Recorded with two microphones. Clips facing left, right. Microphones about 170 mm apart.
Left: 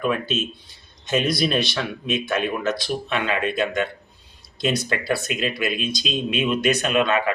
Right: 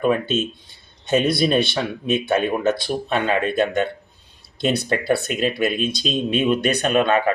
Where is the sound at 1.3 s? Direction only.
25° right (ahead or behind).